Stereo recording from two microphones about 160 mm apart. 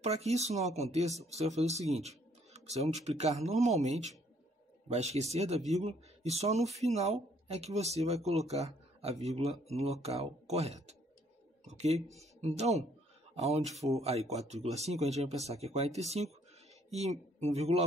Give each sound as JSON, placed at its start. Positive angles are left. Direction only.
{"t": 0.0, "sound": "speech", "side_deg": -45}